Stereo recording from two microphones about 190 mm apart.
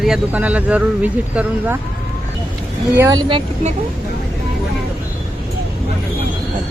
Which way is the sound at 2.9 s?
10° right (ahead or behind).